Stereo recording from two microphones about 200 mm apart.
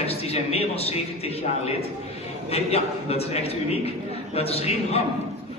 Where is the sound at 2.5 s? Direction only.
30° left (ahead or behind).